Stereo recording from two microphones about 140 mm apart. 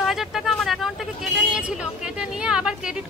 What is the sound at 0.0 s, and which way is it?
Vehicle, centre (ahead or behind).